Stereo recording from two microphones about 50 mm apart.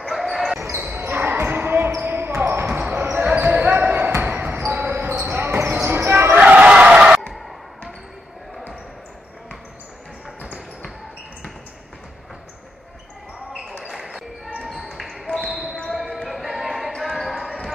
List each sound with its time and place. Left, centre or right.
0.1 s basketball bounce: centre
0.7 s basketball bounce: right
2.6 s basketball bounce: right
2.9 s basketball bounce: right
5.2 s basketball bounce: right
5.8 s basketball bounce: right
6.3 s a sound: right
13.8 s basketball bounce: centre
16.3 s music: centre
17.0 s basketball bounce: centre